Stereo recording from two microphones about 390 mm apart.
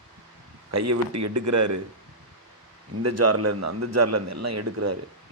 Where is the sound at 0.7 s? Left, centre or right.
Right.